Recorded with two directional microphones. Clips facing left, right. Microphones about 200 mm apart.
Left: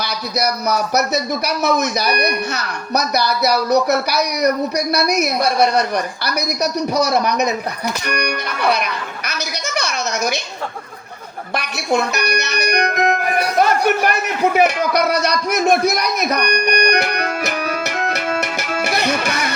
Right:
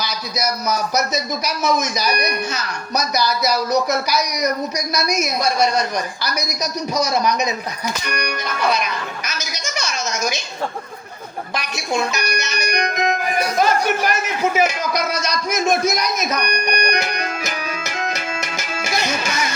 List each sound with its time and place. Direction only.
0.0 s speech: 60° left (ahead or behind)
11.5 s speech: 60° left (ahead or behind)